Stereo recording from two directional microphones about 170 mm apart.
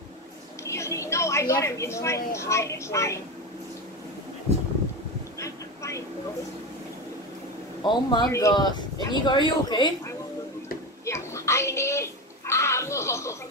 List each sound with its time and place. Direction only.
0.7 s a woman's voice: 15° left (ahead or behind)
5.4 s vehicle: 15° left (ahead or behind)
7.8 s speech: 25° left (ahead or behind)
11.1 s a sound: 15° left (ahead or behind)